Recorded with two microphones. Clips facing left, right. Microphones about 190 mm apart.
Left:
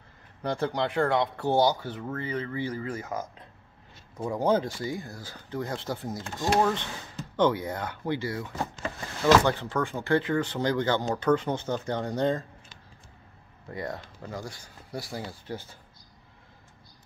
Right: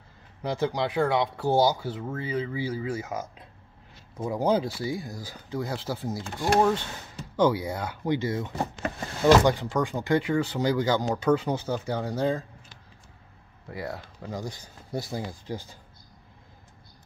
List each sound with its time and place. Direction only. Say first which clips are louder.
0.4 s speech: right 1 dB; 5° right (ahead or behind)
13.7 s speech: even; 5° right (ahead or behind)
14.3 s speech: right 3 dB; 20° right (ahead or behind)